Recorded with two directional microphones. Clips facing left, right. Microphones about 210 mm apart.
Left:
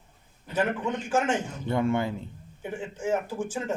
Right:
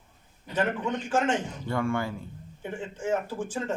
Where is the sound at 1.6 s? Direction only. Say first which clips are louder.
Left 4 dB; 20° left (ahead or behind).